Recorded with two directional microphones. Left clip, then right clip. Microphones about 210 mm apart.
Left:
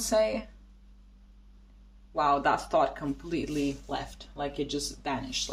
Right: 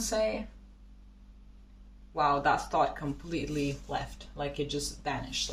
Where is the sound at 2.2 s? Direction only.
45° left (ahead or behind).